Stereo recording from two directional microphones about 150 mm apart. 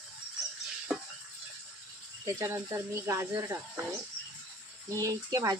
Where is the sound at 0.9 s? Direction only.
5° right (ahead or behind).